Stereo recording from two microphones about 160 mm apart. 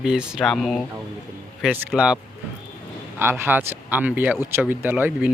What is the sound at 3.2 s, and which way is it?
Speech, 15° right (ahead or behind).